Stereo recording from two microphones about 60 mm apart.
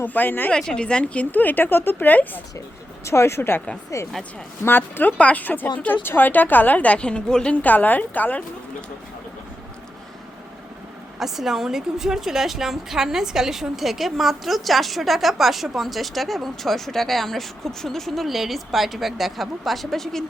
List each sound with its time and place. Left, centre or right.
0.0 s speech: left
0.5 s a woman's voice: centre; by 2.4 s left
3.0 s speech: left
3.9 s speech: left
4.6 s speech: left
5.1 s a woman's voice: left
7.5 s a woman's voice: left
11.2 s a woman's voice: centre